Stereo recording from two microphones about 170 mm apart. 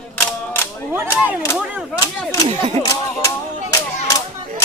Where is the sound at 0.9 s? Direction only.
10° right (ahead or behind).